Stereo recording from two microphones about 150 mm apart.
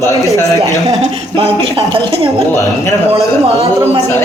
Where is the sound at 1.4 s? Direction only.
40° right (ahead or behind).